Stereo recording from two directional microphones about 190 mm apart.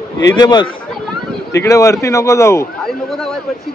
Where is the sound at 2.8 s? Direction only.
Centre (ahead or behind).